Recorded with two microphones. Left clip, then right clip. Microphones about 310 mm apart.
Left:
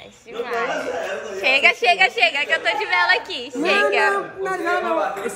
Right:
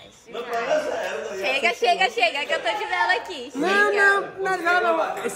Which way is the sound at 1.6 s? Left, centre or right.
Centre.